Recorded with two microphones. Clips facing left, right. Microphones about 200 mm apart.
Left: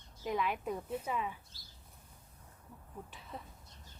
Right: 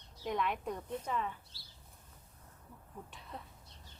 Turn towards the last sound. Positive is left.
turn(degrees=0)  # may be behind; listen again after turning